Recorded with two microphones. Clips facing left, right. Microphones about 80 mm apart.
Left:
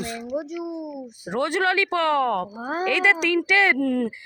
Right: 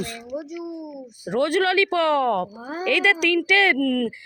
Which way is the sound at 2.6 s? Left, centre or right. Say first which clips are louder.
Left 4 dB; left.